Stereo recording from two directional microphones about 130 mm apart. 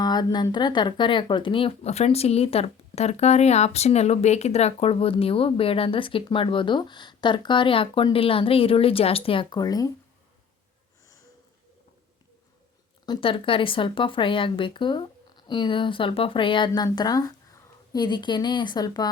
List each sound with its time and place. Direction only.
0.0 s a sound: 30° left (ahead or behind)
0.5 s speech: 35° left (ahead or behind)
13.1 s speech: 45° left (ahead or behind)